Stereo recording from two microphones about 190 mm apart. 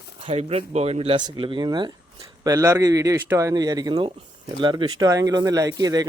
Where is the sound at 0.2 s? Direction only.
30° right (ahead or behind).